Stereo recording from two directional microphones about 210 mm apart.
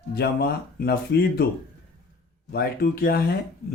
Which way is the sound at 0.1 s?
45° left (ahead or behind).